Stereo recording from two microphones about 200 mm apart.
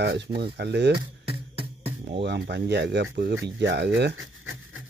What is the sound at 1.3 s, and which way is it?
Music, 30° right (ahead or behind).